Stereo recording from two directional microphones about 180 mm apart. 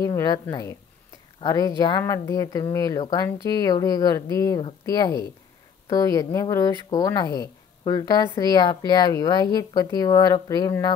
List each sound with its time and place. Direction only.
0.0 s a woman's voice: 20° left (ahead or behind)